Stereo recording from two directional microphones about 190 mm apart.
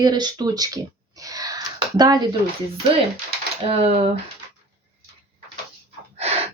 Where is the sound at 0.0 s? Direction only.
20° right (ahead or behind).